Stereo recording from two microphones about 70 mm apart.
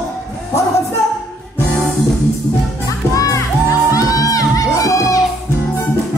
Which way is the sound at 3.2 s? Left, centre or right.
Left.